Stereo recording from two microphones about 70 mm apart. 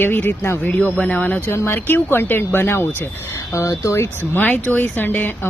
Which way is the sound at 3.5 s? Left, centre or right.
Left.